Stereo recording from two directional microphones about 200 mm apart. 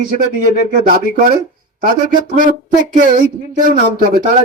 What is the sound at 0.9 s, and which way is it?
Speech, 45° right (ahead or behind).